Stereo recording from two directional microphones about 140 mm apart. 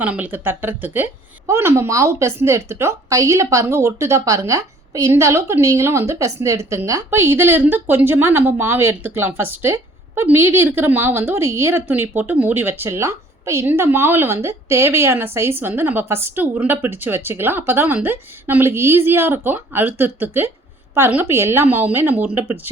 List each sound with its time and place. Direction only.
0.0 s speech: 10° right (ahead or behind)